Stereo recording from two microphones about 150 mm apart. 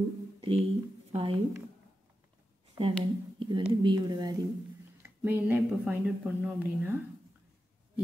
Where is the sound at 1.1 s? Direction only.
40° right (ahead or behind).